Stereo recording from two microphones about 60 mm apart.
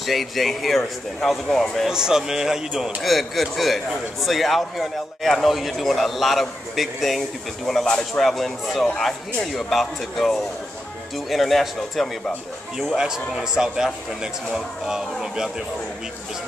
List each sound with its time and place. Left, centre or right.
0.0 s a man's voice: centre
1.9 s a man's voice: centre
7.8 s speech: centre
8.2 s a man's voice: centre
12.7 s speech: centre